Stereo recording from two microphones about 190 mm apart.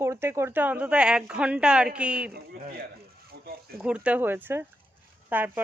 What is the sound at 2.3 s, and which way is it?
Speech, 55° right (ahead or behind).